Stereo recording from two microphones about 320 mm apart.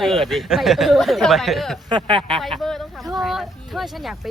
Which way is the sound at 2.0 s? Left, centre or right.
Centre.